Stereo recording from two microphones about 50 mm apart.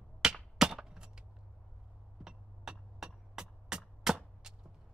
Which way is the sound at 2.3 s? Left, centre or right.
Centre.